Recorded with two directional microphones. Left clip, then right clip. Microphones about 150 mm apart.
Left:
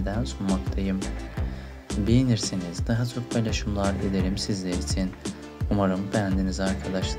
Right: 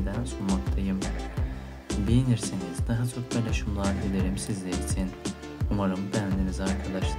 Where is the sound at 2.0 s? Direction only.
30° left (ahead or behind).